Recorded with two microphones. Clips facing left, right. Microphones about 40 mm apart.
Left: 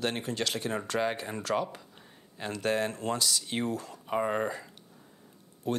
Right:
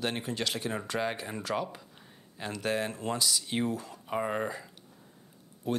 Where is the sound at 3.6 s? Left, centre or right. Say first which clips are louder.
Even; centre.